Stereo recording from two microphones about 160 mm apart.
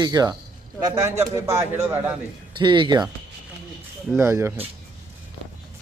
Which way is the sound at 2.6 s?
30° right (ahead or behind).